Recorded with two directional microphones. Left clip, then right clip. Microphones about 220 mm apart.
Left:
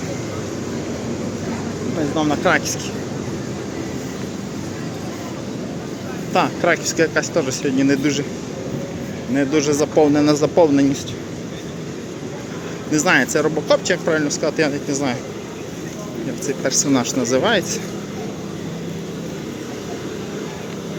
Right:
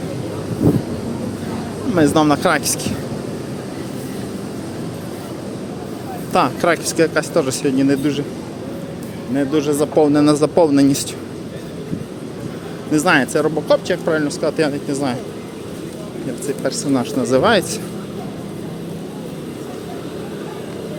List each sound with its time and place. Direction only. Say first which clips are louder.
2.0 s speech: right 7 dB; 35° right (ahead or behind)
6.3 s speech: right 2 dB; 20° right (ahead or behind)
9.3 s speech: even; 5° right (ahead or behind); by 11.0 s 20° right (ahead or behind)
12.9 s speech: right 1 dB; 15° right (ahead or behind)
16.6 s speech: left 2 dB; 10° right (ahead or behind)